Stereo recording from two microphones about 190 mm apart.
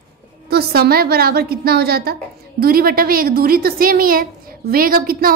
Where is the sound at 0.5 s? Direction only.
55° right (ahead or behind).